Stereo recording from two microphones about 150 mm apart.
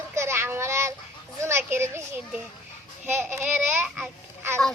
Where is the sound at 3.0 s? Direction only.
10° right (ahead or behind).